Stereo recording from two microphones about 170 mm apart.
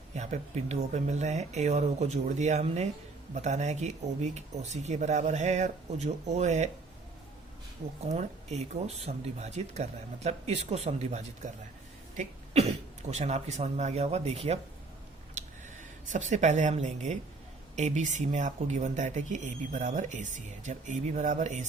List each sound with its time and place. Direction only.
0.1 s speech: 40° right (ahead or behind)
8.0 s speech: 40° right (ahead or behind)
13.1 s speech: 40° right (ahead or behind)
15.4 s a sound: 45° right (ahead or behind)
17.7 s speech: 45° right (ahead or behind)